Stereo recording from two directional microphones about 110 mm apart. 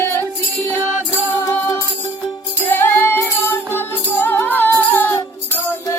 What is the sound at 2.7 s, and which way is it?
Music, 20° left (ahead or behind).